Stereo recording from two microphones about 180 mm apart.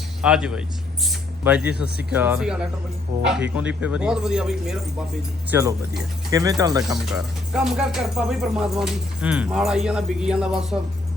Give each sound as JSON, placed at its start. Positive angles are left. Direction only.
{"t": 0.2, "sound": "speech", "side_deg": -5}
{"t": 5.5, "sound": "speech", "side_deg": -15}
{"t": 7.0, "sound": "speech", "side_deg": -5}